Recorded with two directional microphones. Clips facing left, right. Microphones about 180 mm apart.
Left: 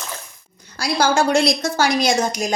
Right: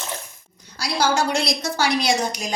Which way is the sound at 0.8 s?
50° left (ahead or behind).